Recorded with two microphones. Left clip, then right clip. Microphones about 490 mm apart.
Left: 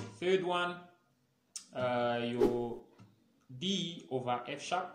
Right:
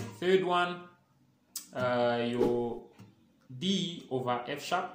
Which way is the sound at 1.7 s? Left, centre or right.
Left.